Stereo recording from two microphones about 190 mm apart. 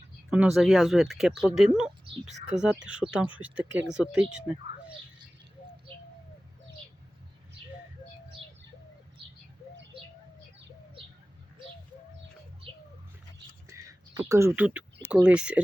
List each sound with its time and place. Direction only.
0.3 s speech: 5° right (ahead or behind)
8.4 s bird: 30° right (ahead or behind)
13.7 s typing: 15° right (ahead or behind)
14.2 s speech: 15° right (ahead or behind)